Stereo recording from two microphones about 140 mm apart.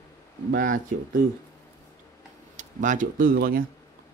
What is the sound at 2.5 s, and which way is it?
Speech, 65° right (ahead or behind).